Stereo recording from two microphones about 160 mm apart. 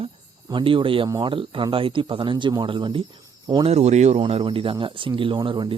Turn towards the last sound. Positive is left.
turn(degrees=-30)  # may be behind; listen again after turning